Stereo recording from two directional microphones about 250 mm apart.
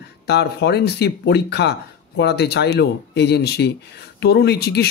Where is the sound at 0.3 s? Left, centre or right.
Left.